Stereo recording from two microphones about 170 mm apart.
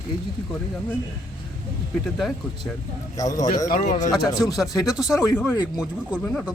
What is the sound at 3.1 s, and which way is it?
Speech, 20° left (ahead or behind).